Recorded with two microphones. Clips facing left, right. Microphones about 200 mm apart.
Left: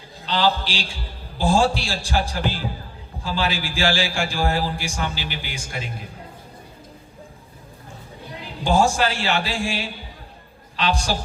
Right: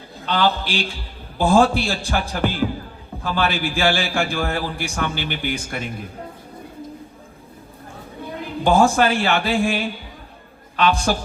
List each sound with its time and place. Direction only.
0.3 s a man's voice: 55° right (ahead or behind)
8.4 s a man's voice: 55° right (ahead or behind)